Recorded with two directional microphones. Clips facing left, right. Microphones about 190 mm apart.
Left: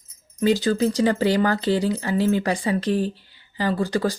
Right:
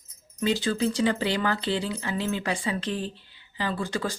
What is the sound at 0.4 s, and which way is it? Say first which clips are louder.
Speech: left 6 dB; 40° left (ahead or behind).